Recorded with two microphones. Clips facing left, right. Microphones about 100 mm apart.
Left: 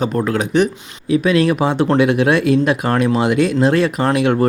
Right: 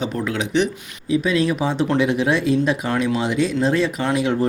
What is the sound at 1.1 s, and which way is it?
Speech, 65° left (ahead or behind).